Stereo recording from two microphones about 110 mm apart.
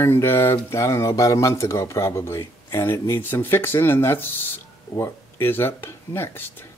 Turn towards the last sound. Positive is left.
turn(degrees=20)  # may be behind; listen again after turning